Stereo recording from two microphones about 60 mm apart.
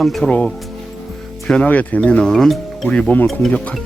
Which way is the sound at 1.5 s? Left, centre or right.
Left.